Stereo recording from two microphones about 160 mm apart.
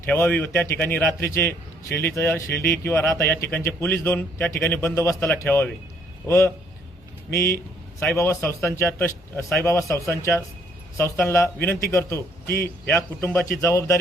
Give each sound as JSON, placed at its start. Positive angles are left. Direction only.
{"t": 0.1, "sound": "a man's voice", "side_deg": 10}